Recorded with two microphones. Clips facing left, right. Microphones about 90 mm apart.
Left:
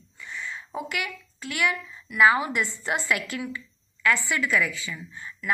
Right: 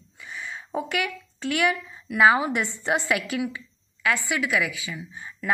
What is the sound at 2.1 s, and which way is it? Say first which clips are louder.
A woman's voice: right 1 dB; 25° right (ahead or behind).